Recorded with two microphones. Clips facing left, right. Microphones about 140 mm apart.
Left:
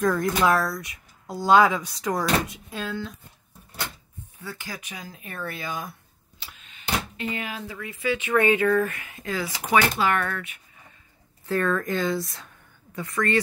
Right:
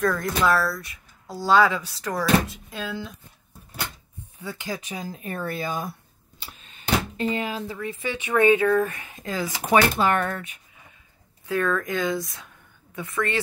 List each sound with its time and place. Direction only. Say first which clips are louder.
0.0 s speech: left 1 dB; 10° left (ahead or behind)
2.8 s speech: left 1 dB; 5° right (ahead or behind)
4.4 s speech: right 5 dB; 20° right (ahead or behind)
4.7 s speech: right 6 dB; 30° right (ahead or behind)
6.4 s a sound: right 2 dB; 40° right (ahead or behind)
8.3 s speech: right 3 dB; 10° right (ahead or behind)
9.2 s speech: right 1 dB; 25° right (ahead or behind)
11.4 s speech: even; centre (ahead or behind)
13.0 s speech: left 2 dB; 25° right (ahead or behind)